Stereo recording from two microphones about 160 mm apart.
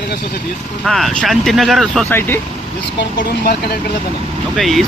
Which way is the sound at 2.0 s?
10° left (ahead or behind).